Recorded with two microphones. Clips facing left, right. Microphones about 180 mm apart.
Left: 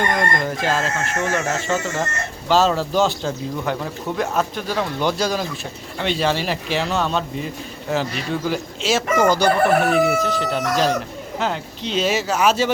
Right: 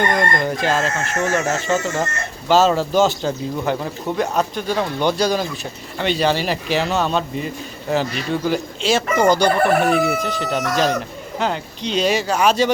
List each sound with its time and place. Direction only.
0.4 s speech: centre (ahead or behind)